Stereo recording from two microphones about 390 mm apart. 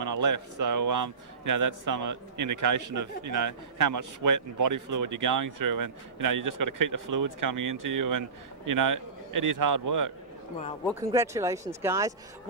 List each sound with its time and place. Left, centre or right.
0.0 s a man's voice: right
10.8 s speech: centre